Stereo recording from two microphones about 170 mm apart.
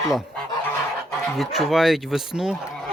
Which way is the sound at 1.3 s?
Centre (ahead or behind).